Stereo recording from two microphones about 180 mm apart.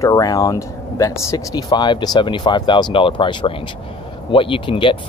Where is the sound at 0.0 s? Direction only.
20° left (ahead or behind).